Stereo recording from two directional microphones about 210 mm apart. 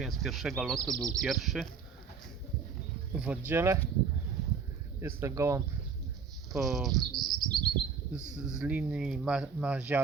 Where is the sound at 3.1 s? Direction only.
5° right (ahead or behind).